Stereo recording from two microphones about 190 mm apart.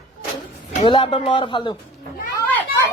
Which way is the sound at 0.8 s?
30° left (ahead or behind).